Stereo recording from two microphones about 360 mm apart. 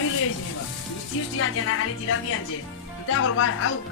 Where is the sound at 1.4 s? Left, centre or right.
Left.